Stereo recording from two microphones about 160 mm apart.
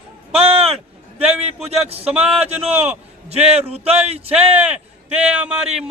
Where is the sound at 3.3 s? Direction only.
40° right (ahead or behind).